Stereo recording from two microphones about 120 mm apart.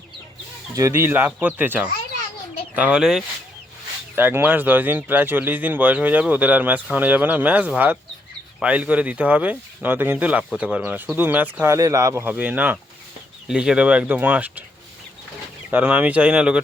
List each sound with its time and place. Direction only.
0.8 s a man's voice: 25° right (ahead or behind); by 3.2 s 5° right (ahead or behind)
4.1 s a man's voice: 15° right (ahead or behind)
15.7 s a man's voice: 15° right (ahead or behind)